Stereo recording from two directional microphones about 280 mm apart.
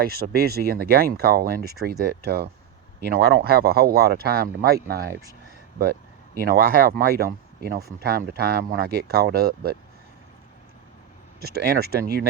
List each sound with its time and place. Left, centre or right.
0.0 s speech: right
6.4 s speech: right
11.3 s speech: right